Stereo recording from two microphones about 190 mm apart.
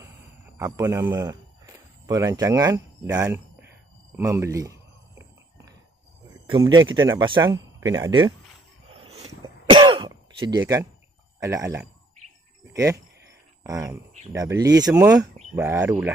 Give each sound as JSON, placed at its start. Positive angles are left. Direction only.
{"t": 0.0, "sound": "a sound", "side_deg": -15}
{"t": 2.0, "sound": "speech", "side_deg": -20}
{"t": 6.5, "sound": "speech", "side_deg": -25}
{"t": 8.9, "sound": "throat clearing", "side_deg": -30}
{"t": 10.6, "sound": "speech", "side_deg": -15}